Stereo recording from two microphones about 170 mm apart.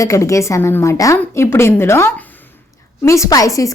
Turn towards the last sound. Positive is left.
turn(degrees=20)  # may be behind; listen again after turning